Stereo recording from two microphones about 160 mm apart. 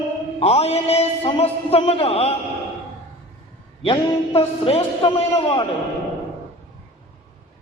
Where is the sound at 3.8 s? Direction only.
35° left (ahead or behind).